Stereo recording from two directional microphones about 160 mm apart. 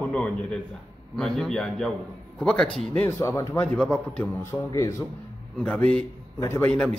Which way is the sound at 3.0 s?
15° left (ahead or behind).